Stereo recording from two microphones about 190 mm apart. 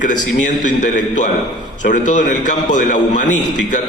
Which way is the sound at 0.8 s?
40° left (ahead or behind).